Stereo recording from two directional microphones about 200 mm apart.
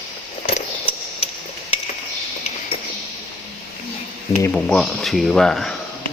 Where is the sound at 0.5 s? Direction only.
30° left (ahead or behind).